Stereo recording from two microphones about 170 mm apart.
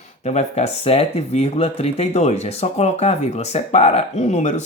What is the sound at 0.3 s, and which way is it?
Speech, 40° left (ahead or behind).